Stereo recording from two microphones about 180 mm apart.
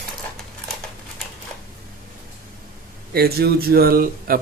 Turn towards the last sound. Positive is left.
turn(degrees=-55)  # may be behind; listen again after turning